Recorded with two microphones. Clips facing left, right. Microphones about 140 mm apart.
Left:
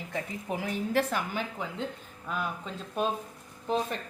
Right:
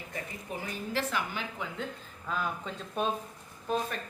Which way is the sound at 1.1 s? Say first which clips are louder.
Left 2 dB; 45° left (ahead or behind).